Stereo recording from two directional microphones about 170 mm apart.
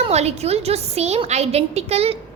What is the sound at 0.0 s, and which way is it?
A woman's voice, 40° right (ahead or behind).